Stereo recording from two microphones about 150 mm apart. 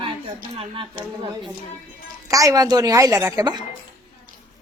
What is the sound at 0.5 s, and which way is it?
Speech, 35° right (ahead or behind).